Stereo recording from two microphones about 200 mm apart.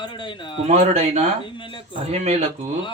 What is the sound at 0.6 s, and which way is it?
Speech, 30° right (ahead or behind).